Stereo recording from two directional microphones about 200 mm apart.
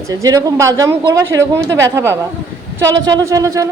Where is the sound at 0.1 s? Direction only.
15° right (ahead or behind).